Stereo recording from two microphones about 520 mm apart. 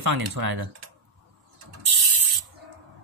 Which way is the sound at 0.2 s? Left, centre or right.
Right.